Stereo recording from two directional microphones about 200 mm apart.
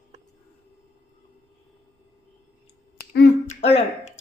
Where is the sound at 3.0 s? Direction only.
50° left (ahead or behind).